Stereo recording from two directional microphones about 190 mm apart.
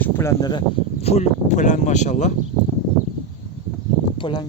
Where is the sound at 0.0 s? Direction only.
15° left (ahead or behind).